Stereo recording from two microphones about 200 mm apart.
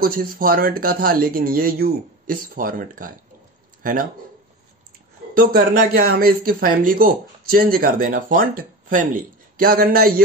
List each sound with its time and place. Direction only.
0.0 s speech: 45° right (ahead or behind)
5.3 s speech: 45° right (ahead or behind)